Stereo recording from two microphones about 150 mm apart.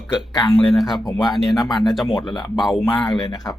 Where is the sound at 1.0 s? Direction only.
25° left (ahead or behind).